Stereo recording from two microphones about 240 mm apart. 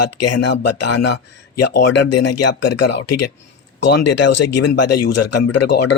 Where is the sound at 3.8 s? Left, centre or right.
Left.